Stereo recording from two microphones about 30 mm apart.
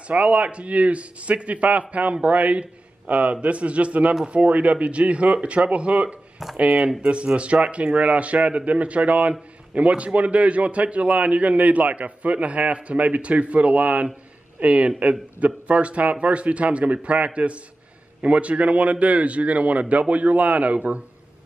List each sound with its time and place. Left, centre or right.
0.1 s a man's voice: right
3.3 s a man's voice: right